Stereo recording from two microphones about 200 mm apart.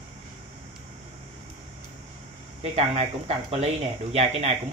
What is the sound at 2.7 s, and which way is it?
Speech, 30° right (ahead or behind).